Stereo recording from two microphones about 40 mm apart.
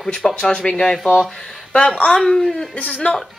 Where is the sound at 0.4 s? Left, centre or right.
Centre.